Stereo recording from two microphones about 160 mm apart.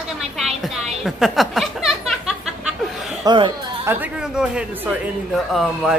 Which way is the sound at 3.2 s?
30° right (ahead or behind).